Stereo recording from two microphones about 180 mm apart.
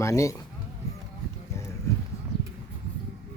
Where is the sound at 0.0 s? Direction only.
15° left (ahead or behind).